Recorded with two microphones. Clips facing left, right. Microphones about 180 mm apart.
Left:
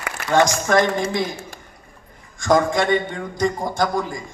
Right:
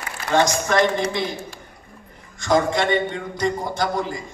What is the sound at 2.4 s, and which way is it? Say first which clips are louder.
A man's voice: left 2 dB; 50° left (ahead or behind).